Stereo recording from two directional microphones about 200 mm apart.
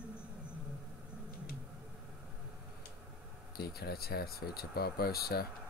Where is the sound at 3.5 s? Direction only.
50° left (ahead or behind).